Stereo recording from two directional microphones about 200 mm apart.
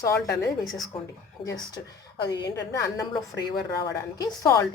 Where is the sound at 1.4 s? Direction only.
20° left (ahead or behind).